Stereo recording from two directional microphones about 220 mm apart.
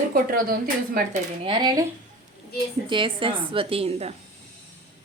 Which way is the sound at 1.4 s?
20° right (ahead or behind).